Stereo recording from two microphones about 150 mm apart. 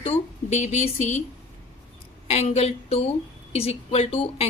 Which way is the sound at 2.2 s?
45° left (ahead or behind).